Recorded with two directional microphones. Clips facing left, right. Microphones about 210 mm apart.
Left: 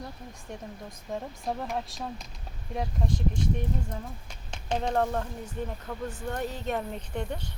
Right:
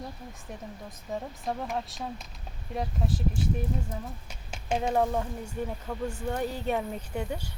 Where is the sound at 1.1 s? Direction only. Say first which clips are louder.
Even; centre (ahead or behind).